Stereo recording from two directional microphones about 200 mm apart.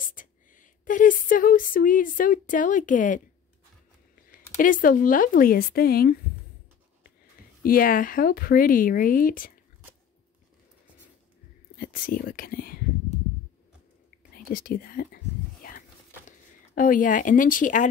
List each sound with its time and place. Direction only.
0.0 s speech: 40° left (ahead or behind)
4.3 s speech: 45° left (ahead or behind)
7.6 s speech: 45° left (ahead or behind)
11.7 s speech: 45° left (ahead or behind)
14.5 s speech: 45° left (ahead or behind)
16.3 s speech: 40° left (ahead or behind)